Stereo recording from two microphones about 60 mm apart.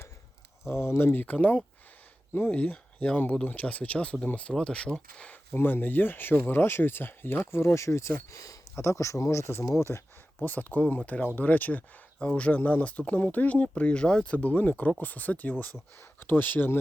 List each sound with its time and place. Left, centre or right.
0.7 s speech: left; by 5.5 s centre
5.5 s speech: left
8.3 s speech: left
10.4 s speech: left
14.3 s speech: left